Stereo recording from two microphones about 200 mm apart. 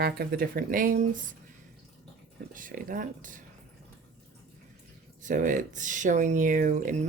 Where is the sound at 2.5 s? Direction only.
40° right (ahead or behind).